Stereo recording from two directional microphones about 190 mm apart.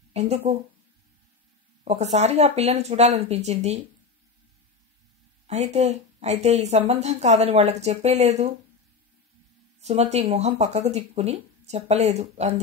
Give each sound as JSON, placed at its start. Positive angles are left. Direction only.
{"t": 0.2, "sound": "a woman's voice", "side_deg": -35}
{"t": 1.9, "sound": "a woman's voice", "side_deg": -35}
{"t": 5.5, "sound": "a woman's voice", "side_deg": -35}
{"t": 9.8, "sound": "a woman's voice", "side_deg": -35}